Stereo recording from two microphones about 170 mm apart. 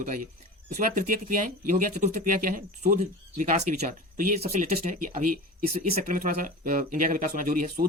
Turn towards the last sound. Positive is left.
turn(degrees=-55)  # may be behind; listen again after turning